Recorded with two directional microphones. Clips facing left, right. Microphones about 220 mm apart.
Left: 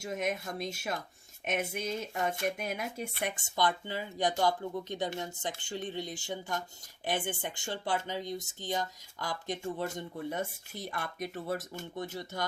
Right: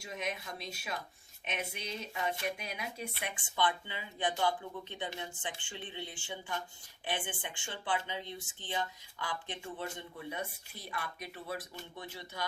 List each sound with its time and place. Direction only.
0.0 s speech: 45° left (ahead or behind)